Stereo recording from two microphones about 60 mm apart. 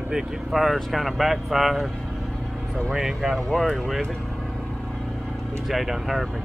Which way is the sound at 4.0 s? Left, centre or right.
Centre.